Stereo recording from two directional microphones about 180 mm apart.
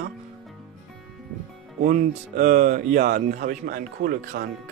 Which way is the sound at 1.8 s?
45° right (ahead or behind).